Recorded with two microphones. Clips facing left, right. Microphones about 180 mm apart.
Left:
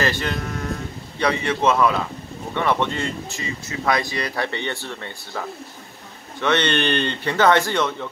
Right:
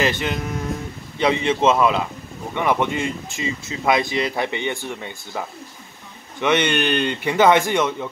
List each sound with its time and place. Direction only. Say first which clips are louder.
0.0 s a man's voice: right 2 dB; 20° right (ahead or behind)
6.4 s a man's voice: right 1 dB; 15° right (ahead or behind)